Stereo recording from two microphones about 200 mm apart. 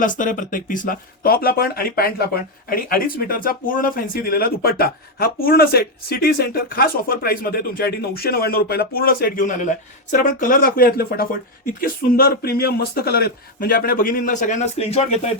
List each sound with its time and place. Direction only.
0.0 s speech: 40° left (ahead or behind)